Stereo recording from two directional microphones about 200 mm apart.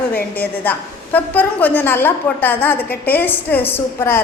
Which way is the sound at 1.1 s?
10° left (ahead or behind).